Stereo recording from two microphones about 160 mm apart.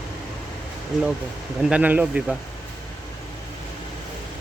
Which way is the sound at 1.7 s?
10° right (ahead or behind).